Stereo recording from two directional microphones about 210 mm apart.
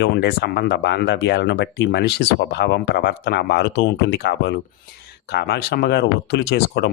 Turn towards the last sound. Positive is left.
turn(degrees=50)  # may be behind; listen again after turning